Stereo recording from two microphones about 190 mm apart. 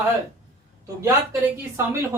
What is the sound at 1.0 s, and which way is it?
Speech, 15° right (ahead or behind).